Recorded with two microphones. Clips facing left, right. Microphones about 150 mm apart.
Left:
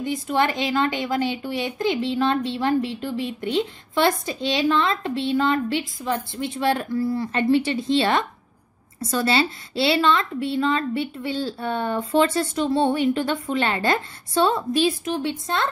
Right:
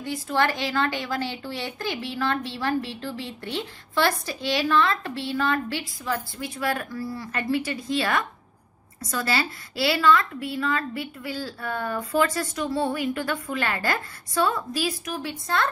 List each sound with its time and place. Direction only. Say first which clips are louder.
0.0 s a woman's voice: left 2 dB; 20° left (ahead or behind)